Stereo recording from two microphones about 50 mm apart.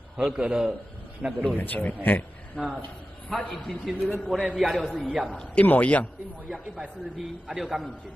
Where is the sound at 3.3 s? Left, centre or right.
Left.